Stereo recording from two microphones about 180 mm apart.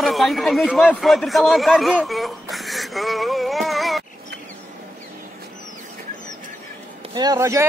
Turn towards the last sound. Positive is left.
turn(degrees=-15)  # may be behind; listen again after turning